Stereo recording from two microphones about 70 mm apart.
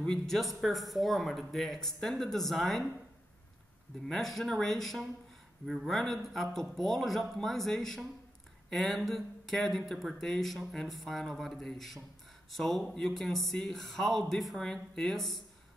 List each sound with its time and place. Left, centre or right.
0.0 s speech: centre
4.1 s speech: centre